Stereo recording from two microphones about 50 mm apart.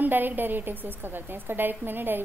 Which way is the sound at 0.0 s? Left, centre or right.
Right.